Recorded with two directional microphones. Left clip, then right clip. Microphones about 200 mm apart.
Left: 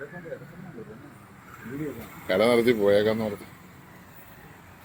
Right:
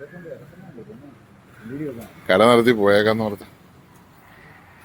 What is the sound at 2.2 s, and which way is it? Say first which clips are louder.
Speech: right 7 dB; 30° right (ahead or behind).